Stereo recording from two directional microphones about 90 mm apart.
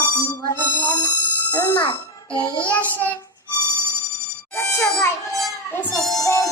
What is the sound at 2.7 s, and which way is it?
Child singing, 20° left (ahead or behind).